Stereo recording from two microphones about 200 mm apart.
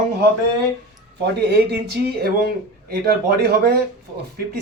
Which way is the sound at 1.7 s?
55° right (ahead or behind).